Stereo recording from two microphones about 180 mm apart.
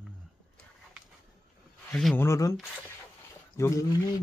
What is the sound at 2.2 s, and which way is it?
Speech, 15° left (ahead or behind).